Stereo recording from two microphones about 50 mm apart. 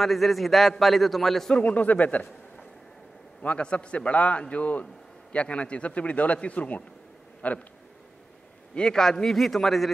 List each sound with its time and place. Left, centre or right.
0.0 s a man's voice: centre
1.5 s a man's voice: left
3.4 s a man's voice: left
8.7 s a man's voice: centre